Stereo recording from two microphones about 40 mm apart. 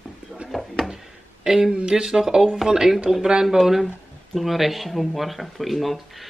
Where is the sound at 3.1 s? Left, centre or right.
Centre.